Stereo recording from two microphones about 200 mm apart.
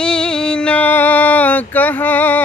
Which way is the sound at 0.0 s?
5° left (ahead or behind).